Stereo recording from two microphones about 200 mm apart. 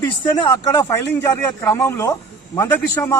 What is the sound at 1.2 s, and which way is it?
Speech, 15° left (ahead or behind).